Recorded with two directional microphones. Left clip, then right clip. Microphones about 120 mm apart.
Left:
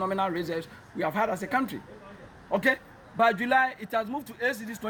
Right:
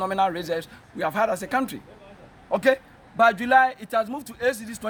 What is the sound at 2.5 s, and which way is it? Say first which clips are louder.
Speech: right 4 dB; 40° right (ahead or behind).